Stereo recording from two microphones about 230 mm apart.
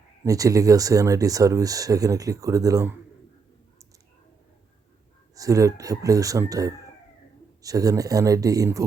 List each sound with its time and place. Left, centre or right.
0.3 s speech: centre
5.3 s speech: centre